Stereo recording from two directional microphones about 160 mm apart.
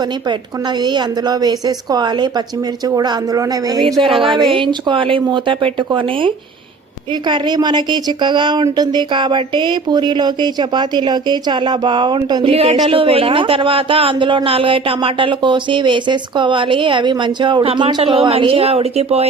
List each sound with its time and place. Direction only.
0.0 s a woman's voice: 25° right (ahead or behind)